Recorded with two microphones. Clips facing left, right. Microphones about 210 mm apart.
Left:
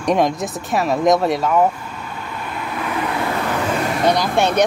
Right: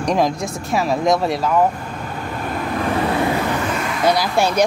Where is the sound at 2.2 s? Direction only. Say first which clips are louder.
Right 5 dB; 45° right (ahead or behind).